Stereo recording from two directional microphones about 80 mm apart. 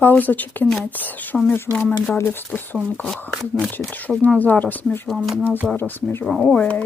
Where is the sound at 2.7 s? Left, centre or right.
Centre.